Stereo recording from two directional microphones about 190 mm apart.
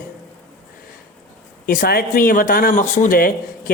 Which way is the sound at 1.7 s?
50° left (ahead or behind).